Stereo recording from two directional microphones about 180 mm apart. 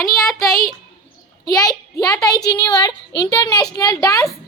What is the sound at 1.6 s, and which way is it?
A woman's voice, 20° left (ahead or behind).